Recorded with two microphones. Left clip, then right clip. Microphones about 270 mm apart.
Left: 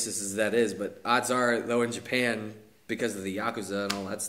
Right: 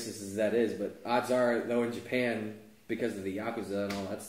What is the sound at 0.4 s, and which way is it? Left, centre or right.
Speech, left.